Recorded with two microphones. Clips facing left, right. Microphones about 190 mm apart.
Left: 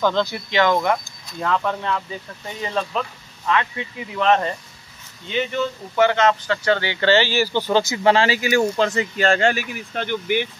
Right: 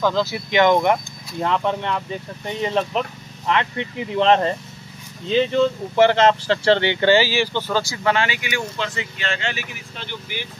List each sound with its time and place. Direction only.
0.0 s speech: 5° right (ahead or behind)
0.5 s speech: 20° right (ahead or behind)
7.5 s speech: 20° left (ahead or behind); by 10.4 s 55° left (ahead or behind)